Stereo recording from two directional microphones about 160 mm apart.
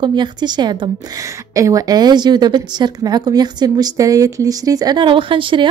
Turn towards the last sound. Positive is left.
turn(degrees=-30)  # may be behind; listen again after turning